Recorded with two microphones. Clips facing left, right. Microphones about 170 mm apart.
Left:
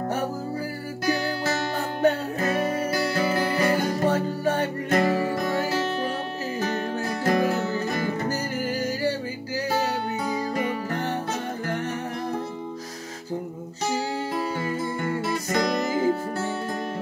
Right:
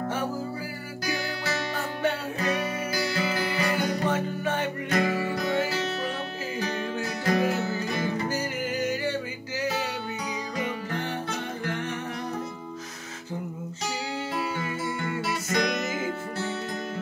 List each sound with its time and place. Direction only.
1.0 s music: 45° left (ahead or behind)
10.5 s music: 45° left (ahead or behind)
13.8 s music: 40° left (ahead or behind)